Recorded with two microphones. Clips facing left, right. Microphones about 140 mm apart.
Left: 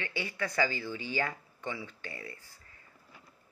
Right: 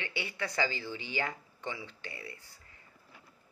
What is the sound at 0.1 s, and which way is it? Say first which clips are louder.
Speech: left 2 dB; 40° left (ahead or behind).